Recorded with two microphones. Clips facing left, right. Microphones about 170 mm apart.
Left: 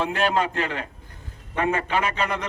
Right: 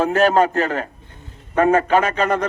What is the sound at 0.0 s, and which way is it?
A man's voice, 45° right (ahead or behind).